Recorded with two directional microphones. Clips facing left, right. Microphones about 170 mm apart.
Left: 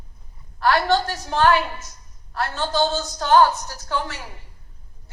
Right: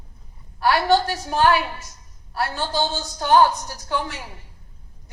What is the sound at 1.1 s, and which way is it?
A woman's voice, 10° right (ahead or behind).